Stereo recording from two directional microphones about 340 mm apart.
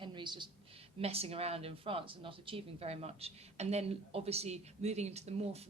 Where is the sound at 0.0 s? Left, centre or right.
Centre.